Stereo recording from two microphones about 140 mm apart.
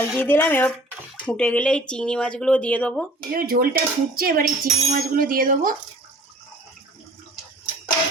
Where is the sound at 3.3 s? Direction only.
90° right.